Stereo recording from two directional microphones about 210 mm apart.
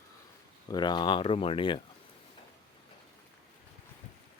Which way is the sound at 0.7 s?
20° left (ahead or behind).